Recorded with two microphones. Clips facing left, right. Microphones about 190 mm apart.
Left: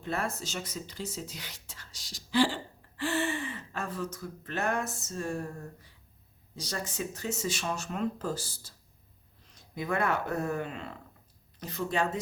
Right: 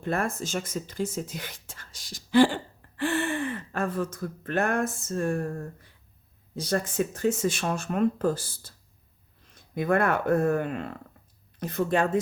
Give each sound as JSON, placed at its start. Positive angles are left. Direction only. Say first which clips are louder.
{"t": 0.0, "sound": "speech", "louder": "right 5 dB", "side_deg": -50}